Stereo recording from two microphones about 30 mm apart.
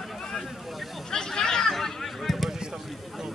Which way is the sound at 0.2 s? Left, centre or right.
Centre.